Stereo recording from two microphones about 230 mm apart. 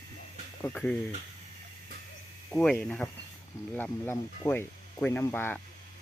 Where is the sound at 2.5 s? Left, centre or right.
Centre.